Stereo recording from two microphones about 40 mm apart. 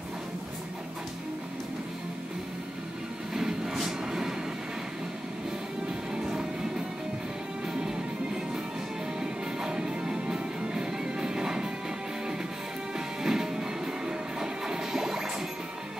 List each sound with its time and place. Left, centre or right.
3.3 s a sound: centre
6.1 s music: centre
7.6 s music: centre
9.2 s music: centre
12.9 s music: centre